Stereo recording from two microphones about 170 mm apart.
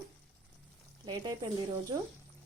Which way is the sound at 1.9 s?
25° right (ahead or behind).